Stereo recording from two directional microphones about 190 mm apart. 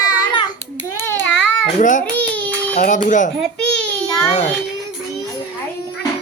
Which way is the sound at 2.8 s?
45° left (ahead or behind).